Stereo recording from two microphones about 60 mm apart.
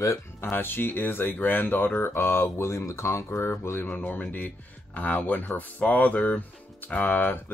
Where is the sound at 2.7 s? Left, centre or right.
Left.